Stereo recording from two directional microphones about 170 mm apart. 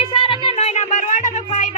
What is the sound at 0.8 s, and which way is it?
Music, 45° left (ahead or behind).